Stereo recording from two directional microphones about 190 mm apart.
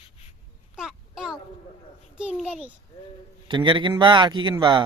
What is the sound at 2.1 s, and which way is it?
Speech, 5° right (ahead or behind).